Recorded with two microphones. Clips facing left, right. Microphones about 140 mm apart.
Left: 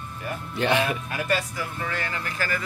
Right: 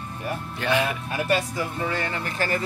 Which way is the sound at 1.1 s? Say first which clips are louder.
Right 2 dB; 25° right (ahead or behind).